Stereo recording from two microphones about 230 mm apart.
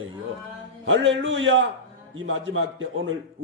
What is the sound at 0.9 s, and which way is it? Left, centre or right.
A man's voice, right.